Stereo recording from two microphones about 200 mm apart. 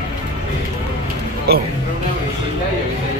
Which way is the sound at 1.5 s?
55° right (ahead or behind).